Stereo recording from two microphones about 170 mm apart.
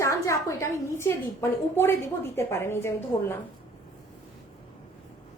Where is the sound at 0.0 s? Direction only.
15° left (ahead or behind).